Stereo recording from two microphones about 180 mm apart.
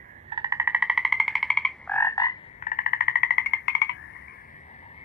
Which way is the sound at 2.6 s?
45° left (ahead or behind).